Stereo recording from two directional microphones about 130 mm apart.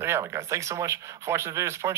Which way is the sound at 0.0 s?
20° right (ahead or behind).